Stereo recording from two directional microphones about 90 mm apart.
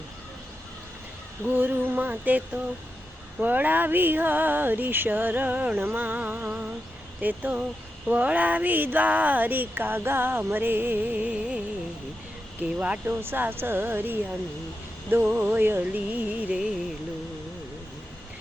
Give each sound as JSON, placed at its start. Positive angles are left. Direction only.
{"t": 1.5, "sound": "speech", "side_deg": -20}
{"t": 12.5, "sound": "music", "side_deg": -15}
{"t": 13.1, "sound": "speech", "side_deg": -25}
{"t": 15.1, "sound": "music", "side_deg": -15}